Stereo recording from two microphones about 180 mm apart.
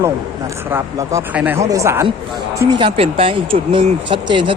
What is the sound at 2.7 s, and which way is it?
Speech, 30° right (ahead or behind).